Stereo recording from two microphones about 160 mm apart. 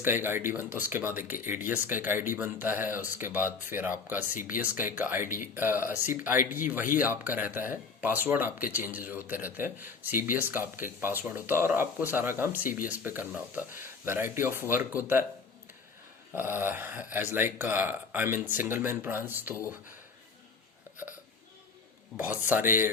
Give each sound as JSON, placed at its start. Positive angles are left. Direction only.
{"t": 0.0, "sound": "speech", "side_deg": -15}
{"t": 4.4, "sound": "speech", "side_deg": 60}
{"t": 4.6, "sound": "speech", "side_deg": -10}
{"t": 16.3, "sound": "speech", "side_deg": -15}
{"t": 22.2, "sound": "speech", "side_deg": -10}